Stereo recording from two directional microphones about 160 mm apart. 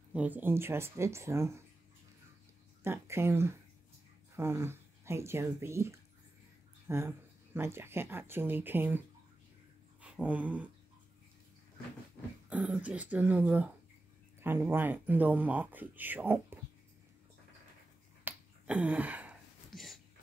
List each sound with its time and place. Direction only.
0.1 s speech: 10° right (ahead or behind)
2.8 s speech: 15° right (ahead or behind)
10.0 s a sound: 5° right (ahead or behind)
12.8 s speech: 10° right (ahead or behind)
18.2 s finger snapping: 5° right (ahead or behind)
19.7 s a sound: centre (ahead or behind)